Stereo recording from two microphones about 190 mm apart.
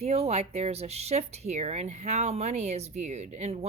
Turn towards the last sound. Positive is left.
turn(degrees=-35)  # may be behind; listen again after turning